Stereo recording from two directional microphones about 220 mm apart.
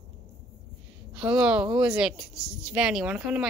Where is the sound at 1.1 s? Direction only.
5° right (ahead or behind).